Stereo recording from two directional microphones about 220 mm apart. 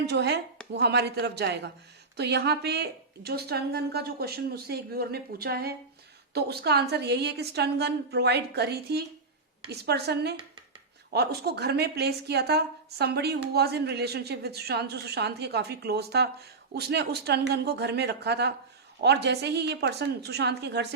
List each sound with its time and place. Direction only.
0.0 s a woman's voice: 50° right (ahead or behind)